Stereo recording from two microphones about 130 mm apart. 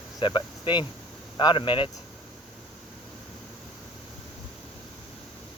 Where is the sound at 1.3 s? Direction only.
40° left (ahead or behind).